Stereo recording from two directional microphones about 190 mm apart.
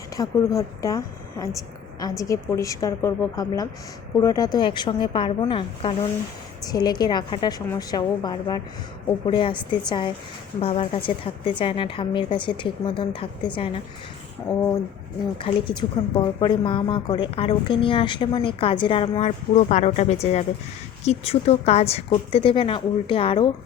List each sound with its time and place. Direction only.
0.2 s a woman's voice: 20° left (ahead or behind)
14.5 s a woman's voice: 15° left (ahead or behind)
15.4 s a woman's voice: 25° left (ahead or behind)